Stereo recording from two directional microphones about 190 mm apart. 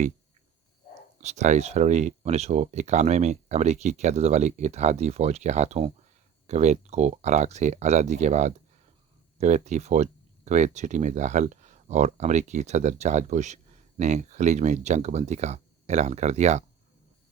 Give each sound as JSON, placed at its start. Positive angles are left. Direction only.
{"t": 1.2, "sound": "speech", "side_deg": -40}